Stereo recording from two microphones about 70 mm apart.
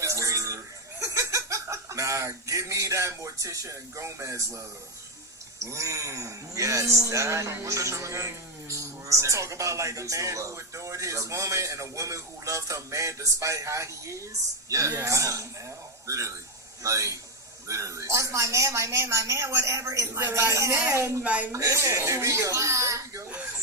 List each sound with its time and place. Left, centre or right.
0.0 s chuckle: right
5.6 s speech: right
21.2 s speech: right
21.5 s speech: right